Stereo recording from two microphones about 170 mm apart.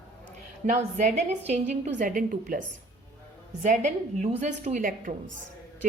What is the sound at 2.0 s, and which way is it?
Speech, 55° right (ahead or behind).